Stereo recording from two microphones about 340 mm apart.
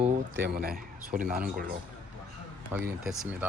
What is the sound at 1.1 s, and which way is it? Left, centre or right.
Speech, right.